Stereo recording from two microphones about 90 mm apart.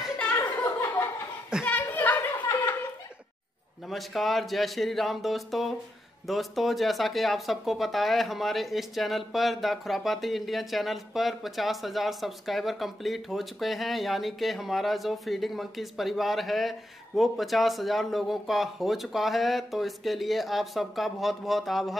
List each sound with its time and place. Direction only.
0.7 s laughter: 20° left (ahead or behind)
1.6 s a sound: 20° left (ahead or behind)
3.9 s speech: centre (ahead or behind)